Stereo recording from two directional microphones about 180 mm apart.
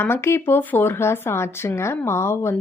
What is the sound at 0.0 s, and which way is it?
A woman's voice, 15° left (ahead or behind).